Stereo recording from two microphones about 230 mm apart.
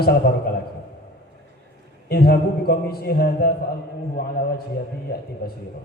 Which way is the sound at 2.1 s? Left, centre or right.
Left.